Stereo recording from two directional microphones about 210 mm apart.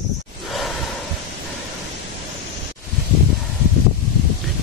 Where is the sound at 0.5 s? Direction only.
Centre (ahead or behind).